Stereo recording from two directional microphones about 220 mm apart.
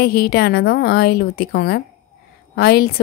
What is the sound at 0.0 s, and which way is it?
A woman's voice, 45° left (ahead or behind).